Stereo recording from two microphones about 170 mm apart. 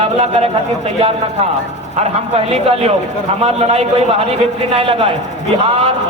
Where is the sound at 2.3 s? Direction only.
35° right (ahead or behind).